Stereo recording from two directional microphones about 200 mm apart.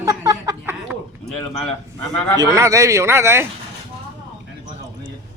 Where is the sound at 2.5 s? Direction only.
15° right (ahead or behind).